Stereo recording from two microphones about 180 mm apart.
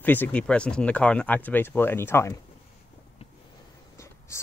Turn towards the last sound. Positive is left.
turn(degrees=15)  # may be behind; listen again after turning